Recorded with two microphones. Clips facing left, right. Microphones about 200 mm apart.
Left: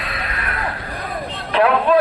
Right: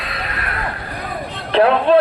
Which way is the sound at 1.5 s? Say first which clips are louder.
Right 2 dB; 30° right (ahead or behind).